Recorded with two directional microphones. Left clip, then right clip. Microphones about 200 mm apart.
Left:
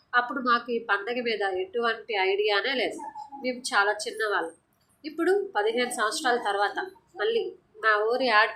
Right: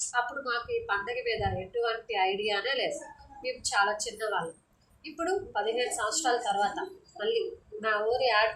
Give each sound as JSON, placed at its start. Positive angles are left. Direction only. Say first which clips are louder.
{"t": 0.1, "sound": "a woman's voice", "louder": "left 7 dB", "side_deg": 30}